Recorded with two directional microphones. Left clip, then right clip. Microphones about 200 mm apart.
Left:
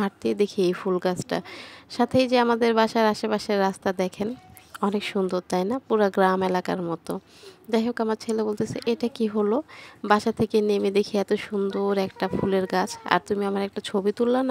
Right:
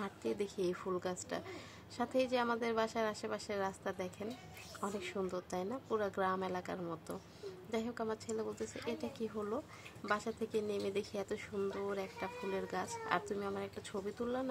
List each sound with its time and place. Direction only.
0.0 s a woman's voice: 45° left (ahead or behind)